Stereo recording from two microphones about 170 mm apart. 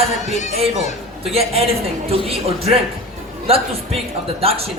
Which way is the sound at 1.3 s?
35° right (ahead or behind).